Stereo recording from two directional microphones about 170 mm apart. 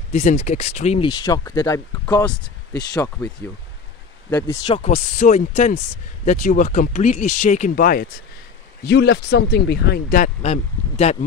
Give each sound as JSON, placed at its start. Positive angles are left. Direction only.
{"t": 0.1, "sound": "speech", "side_deg": 45}
{"t": 1.0, "sound": "speech", "side_deg": 20}
{"t": 4.3, "sound": "speech", "side_deg": 25}
{"t": 4.8, "sound": "speech", "side_deg": 40}
{"t": 8.8, "sound": "speech", "side_deg": 70}